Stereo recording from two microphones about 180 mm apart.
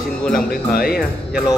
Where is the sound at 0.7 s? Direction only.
55° left (ahead or behind).